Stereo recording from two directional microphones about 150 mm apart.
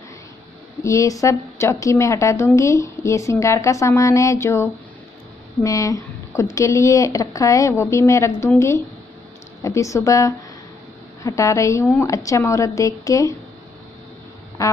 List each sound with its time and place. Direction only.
0.8 s a woman's voice: 20° left (ahead or behind)
14.6 s a woman's voice: 20° left (ahead or behind)